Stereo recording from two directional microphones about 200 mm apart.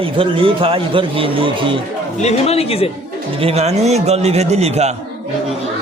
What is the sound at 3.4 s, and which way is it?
A man's voice, 30° right (ahead or behind).